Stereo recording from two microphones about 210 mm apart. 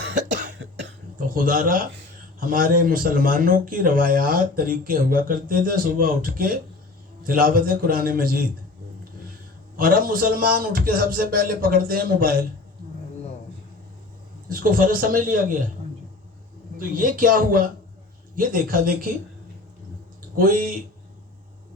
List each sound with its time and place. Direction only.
0.3 s cough: 35° right (ahead or behind)
1.3 s speech: 40° right (ahead or behind)
9.7 s speech: 45° right (ahead or behind)
14.5 s speech: 40° right (ahead or behind)
16.7 s speech: 40° right (ahead or behind)
20.3 s speech: 40° right (ahead or behind)